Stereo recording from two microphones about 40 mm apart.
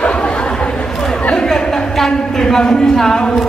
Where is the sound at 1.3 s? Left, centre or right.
Centre.